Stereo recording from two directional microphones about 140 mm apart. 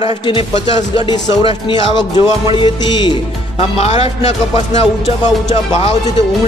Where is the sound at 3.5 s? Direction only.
50° left (ahead or behind).